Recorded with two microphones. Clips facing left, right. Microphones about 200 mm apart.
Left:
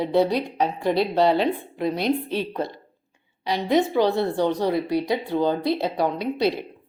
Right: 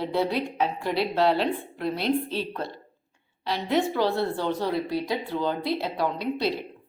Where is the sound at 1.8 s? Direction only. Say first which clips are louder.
Left 3 dB; 45° left (ahead or behind).